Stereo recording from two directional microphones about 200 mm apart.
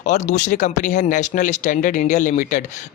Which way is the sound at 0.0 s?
35° left (ahead or behind).